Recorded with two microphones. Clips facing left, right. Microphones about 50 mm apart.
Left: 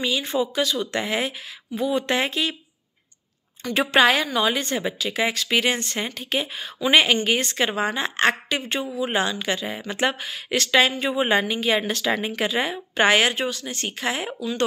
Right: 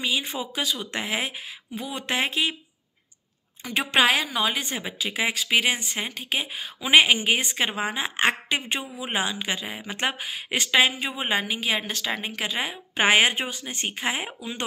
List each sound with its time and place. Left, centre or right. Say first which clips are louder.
0.0 s a woman's voice: left 4 dB; centre
3.8 s a woman's voice: left 3 dB; centre
12.9 s speech: left 1 dB; centre